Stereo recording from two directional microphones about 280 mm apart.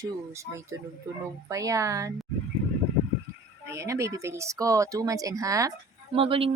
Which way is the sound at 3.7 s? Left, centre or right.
Centre.